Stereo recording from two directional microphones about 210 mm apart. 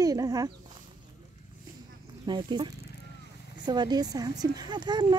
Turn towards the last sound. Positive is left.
turn(degrees=-20)  # may be behind; listen again after turning